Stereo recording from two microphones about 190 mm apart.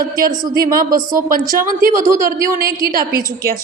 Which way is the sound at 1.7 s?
45° right (ahead or behind).